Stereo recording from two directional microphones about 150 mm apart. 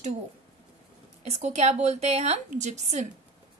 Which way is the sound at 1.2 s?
50° right (ahead or behind).